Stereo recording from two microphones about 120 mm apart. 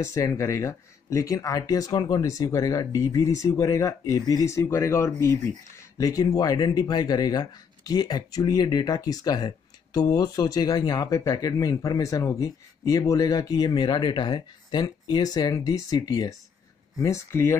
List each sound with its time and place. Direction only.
0.0 s speech: 25° left (ahead or behind)